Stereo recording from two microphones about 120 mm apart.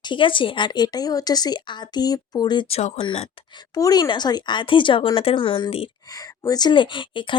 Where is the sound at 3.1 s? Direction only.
55° left (ahead or behind).